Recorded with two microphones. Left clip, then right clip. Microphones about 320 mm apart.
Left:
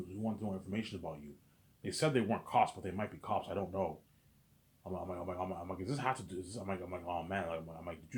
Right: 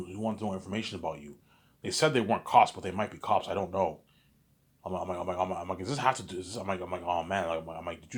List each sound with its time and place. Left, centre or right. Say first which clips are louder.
0.2 s a man's voice: right 8 dB; centre